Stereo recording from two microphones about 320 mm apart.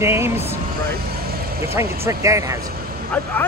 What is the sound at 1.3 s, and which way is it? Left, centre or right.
Vehicle, right.